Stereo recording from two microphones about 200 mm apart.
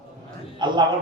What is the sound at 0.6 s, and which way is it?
Speech, 20° right (ahead or behind).